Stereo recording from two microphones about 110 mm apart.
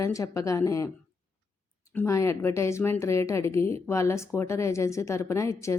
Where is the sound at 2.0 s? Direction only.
25° left (ahead or behind).